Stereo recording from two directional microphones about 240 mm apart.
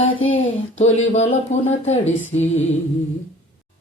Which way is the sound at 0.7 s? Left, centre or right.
Left.